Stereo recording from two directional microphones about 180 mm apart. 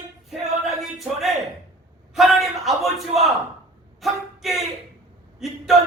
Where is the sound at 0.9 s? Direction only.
Centre (ahead or behind).